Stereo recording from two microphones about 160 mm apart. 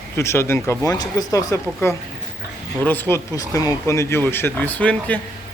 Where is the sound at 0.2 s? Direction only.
15° left (ahead or behind).